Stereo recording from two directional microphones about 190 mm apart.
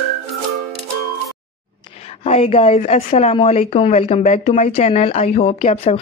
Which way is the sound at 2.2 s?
30° left (ahead or behind).